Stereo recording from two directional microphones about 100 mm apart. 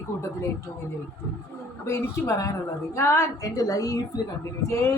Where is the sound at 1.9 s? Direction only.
25° left (ahead or behind).